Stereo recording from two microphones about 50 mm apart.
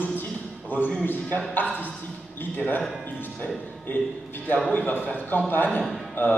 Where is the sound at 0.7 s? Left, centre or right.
Left.